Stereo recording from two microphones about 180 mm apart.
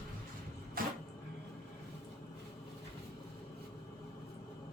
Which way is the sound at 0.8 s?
55° right (ahead or behind).